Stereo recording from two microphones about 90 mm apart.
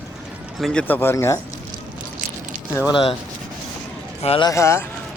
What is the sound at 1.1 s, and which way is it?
Speech, 35° left (ahead or behind).